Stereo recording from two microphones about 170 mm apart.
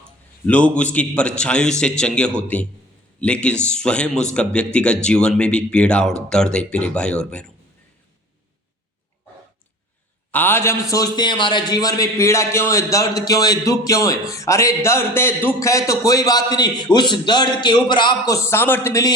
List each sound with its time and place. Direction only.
0.4 s a man's voice: 5° left (ahead or behind)
10.3 s a man's voice: 10° left (ahead or behind)
18.4 s a man's voice: 15° left (ahead or behind)